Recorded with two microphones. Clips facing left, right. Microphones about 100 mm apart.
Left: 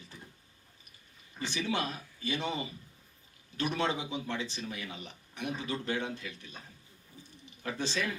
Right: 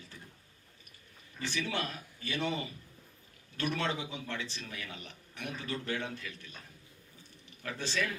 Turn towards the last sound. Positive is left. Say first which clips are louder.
# left 3 dB
turn(degrees=20)  # may be behind; listen again after turning